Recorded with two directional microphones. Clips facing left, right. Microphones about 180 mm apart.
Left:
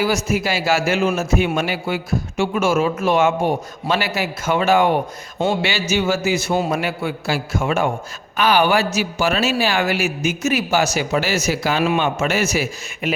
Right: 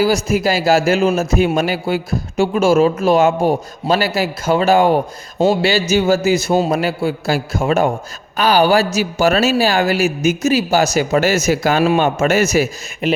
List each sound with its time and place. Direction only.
0.0 s a man's voice: 35° right (ahead or behind)